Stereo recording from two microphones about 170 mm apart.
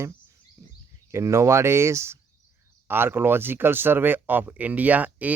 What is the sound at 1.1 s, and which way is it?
Speech, 15° right (ahead or behind).